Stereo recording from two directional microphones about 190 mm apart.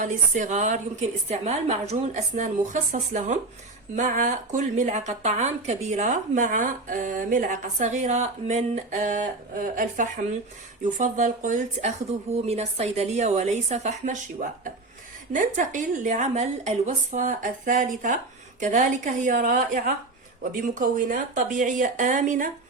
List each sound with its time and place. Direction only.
0.0 s speech: 40° right (ahead or behind)
15.3 s speech: 40° right (ahead or behind)